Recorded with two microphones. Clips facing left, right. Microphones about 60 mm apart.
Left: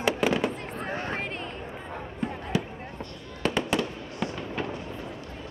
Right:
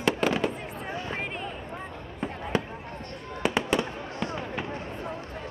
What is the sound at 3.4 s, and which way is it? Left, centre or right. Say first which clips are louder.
Fireworks: right 1 dB; centre.